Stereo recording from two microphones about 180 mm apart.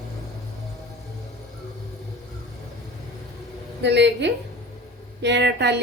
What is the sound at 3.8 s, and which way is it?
A woman's voice, 70° right (ahead or behind).